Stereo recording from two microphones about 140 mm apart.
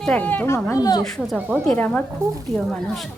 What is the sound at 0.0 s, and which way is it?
Speech, 10° left (ahead or behind).